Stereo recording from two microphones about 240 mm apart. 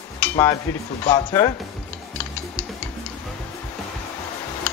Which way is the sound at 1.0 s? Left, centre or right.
Centre.